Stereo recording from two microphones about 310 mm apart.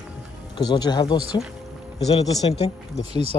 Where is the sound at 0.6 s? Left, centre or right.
Centre.